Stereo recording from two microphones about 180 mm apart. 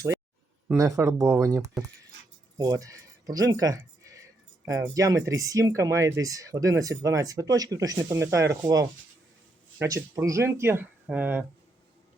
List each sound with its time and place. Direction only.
0.8 s speech: 15° right (ahead or behind)